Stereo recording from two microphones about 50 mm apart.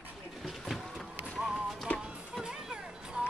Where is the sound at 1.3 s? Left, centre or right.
Centre.